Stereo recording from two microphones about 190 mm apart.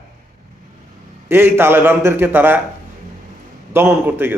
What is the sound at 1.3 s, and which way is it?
A man's voice, 10° right (ahead or behind).